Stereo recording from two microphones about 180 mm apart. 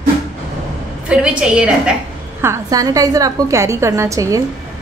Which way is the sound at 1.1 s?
5° right (ahead or behind).